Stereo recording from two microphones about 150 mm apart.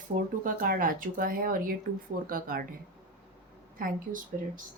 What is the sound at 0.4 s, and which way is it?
Speech, 65° right (ahead or behind).